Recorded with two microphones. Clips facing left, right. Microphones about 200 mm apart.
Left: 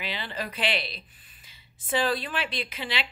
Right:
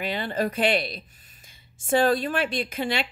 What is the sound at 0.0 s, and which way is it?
Speech, 50° right (ahead or behind).